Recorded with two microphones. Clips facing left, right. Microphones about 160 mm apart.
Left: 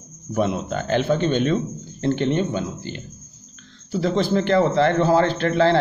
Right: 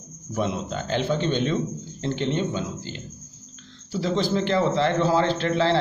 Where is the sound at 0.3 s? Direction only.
55° left (ahead or behind).